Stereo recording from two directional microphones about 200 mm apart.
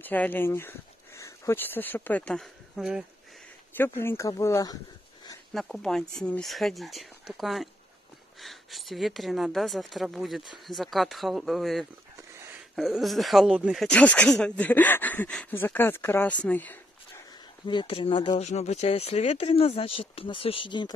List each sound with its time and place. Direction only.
0.0 s speech: 10° left (ahead or behind)
3.7 s speech: 10° left (ahead or behind)
5.5 s speech: centre (ahead or behind)
17.6 s speech: 25° left (ahead or behind)